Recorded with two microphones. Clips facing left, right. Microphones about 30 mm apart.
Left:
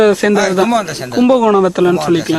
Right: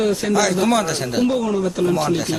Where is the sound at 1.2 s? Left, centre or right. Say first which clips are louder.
Left 13 dB; left.